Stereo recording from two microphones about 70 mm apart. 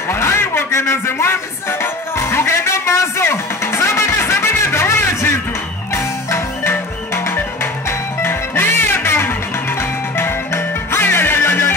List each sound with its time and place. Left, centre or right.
0.1 s music: left
8.2 s music: left